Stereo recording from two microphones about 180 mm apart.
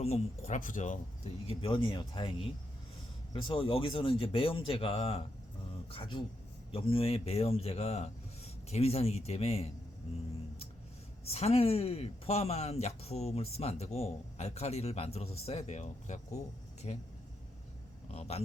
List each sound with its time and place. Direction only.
0.0 s speech: 35° left (ahead or behind)
3.3 s speech: 30° left (ahead or behind)
11.3 s speech: 35° left (ahead or behind)
18.1 s speech: 35° left (ahead or behind)